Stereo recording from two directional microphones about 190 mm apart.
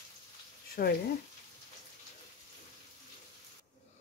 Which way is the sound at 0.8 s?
50° left (ahead or behind).